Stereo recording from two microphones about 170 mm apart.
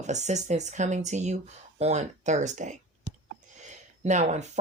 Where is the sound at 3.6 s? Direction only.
45° right (ahead or behind).